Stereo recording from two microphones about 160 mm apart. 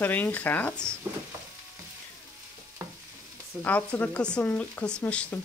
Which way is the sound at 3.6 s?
10° left (ahead or behind).